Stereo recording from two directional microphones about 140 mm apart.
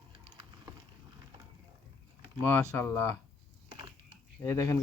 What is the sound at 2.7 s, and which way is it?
Speech, 15° left (ahead or behind).